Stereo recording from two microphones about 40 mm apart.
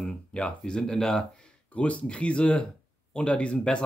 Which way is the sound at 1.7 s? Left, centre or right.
Left.